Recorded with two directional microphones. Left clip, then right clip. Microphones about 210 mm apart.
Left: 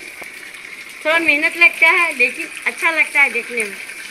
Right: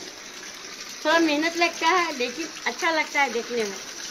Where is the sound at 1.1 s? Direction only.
35° right (ahead or behind).